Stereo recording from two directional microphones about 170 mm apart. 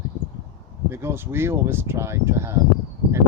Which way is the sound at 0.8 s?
15° right (ahead or behind).